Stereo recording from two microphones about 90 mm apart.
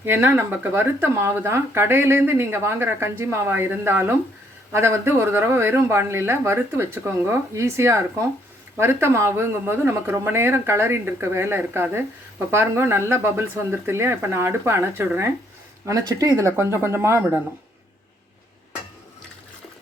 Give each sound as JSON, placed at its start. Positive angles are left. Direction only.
{"t": 0.0, "sound": "speech", "side_deg": -25}